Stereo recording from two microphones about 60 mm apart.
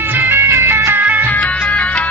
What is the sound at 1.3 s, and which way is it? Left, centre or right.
Music, left.